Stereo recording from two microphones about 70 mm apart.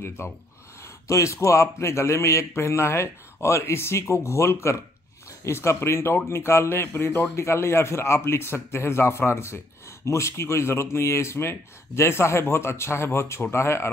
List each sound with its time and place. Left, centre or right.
0.2 s a man's voice: left